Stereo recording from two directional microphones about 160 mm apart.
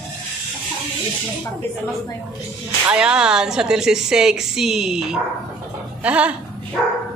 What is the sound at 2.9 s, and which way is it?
A woman's voice, 5° right (ahead or behind).